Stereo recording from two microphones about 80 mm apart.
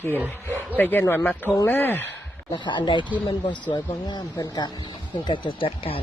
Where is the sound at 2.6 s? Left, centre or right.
Left.